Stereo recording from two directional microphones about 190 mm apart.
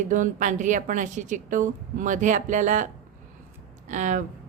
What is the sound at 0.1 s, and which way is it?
A woman's voice, 40° right (ahead or behind).